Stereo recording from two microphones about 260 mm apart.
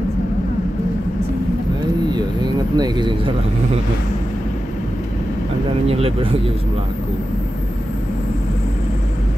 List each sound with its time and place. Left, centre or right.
2.1 s vehicle: centre
5.9 s speech: right